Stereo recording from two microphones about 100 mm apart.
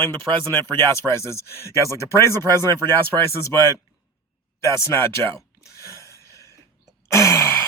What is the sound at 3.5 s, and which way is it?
Speech, 45° right (ahead or behind).